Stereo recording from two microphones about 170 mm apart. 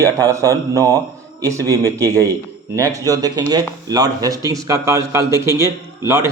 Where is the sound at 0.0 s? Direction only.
20° right (ahead or behind).